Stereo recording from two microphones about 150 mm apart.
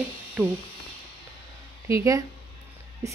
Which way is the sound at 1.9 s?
20° right (ahead or behind).